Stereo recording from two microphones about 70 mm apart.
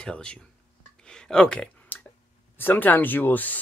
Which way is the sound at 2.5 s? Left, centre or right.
Left.